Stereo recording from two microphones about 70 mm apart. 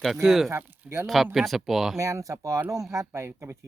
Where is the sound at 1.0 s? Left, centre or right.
Centre.